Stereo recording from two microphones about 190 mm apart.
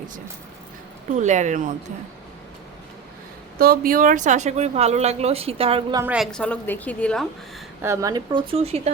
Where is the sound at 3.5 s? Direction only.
50° right (ahead or behind); by 6.0 s 25° right (ahead or behind).